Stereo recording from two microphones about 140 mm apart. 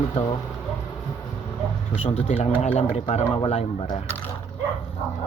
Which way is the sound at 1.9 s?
45° left (ahead or behind).